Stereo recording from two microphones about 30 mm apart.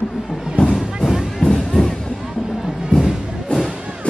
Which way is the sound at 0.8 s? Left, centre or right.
Centre.